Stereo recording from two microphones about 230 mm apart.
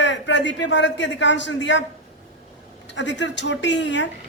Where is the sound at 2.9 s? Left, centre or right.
Left.